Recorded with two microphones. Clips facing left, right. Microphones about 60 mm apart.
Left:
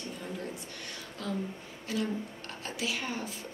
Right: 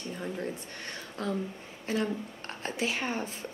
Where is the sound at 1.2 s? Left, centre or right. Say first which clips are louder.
Right 3 dB; right.